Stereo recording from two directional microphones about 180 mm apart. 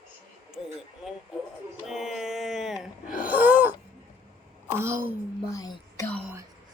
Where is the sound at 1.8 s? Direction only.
Centre (ahead or behind).